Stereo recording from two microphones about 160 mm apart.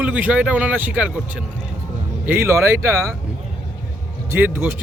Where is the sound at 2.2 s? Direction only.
15° right (ahead or behind).